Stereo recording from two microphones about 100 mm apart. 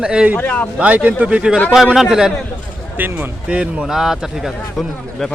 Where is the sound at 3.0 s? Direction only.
20° right (ahead or behind).